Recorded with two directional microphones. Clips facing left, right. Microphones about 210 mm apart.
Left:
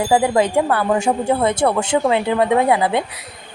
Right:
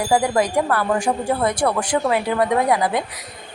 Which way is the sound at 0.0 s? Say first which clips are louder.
Left 3 dB; 25° left (ahead or behind).